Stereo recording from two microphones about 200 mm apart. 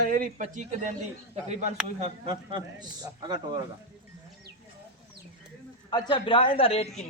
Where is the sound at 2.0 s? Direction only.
25° right (ahead or behind).